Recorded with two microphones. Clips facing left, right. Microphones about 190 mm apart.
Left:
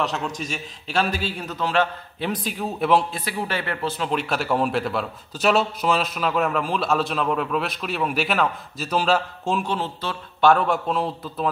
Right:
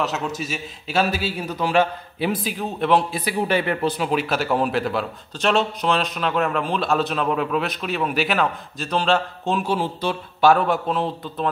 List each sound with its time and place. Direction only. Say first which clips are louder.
0.0 s a man's voice: right 1 dB; 5° right (ahead or behind)
3.1 s speech: right 6 dB; 15° right (ahead or behind)
4.1 s a man's voice: right 2 dB; centre (ahead or behind)